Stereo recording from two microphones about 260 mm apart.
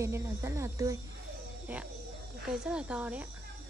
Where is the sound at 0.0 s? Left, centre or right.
Centre.